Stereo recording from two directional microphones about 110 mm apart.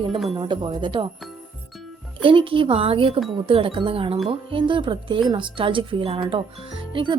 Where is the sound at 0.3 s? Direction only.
45° right (ahead or behind).